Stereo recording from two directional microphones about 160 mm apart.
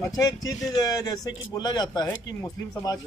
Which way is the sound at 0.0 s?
20° left (ahead or behind).